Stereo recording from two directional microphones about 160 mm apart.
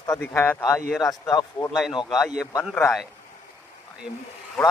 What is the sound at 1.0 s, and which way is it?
Speech, 25° left (ahead or behind).